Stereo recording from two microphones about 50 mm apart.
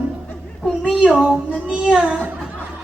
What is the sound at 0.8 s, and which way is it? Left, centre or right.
Speech, centre.